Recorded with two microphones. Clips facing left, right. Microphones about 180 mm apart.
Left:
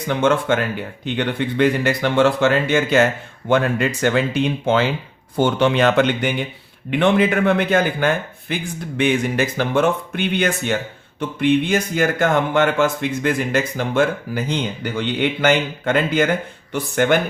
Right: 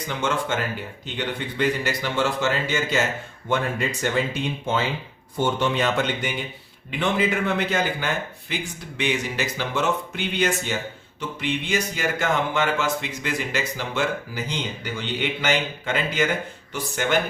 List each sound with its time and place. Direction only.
0.1 s speech: 60° left (ahead or behind)
3.5 s speech: 75° left (ahead or behind); by 17.2 s 55° left (ahead or behind)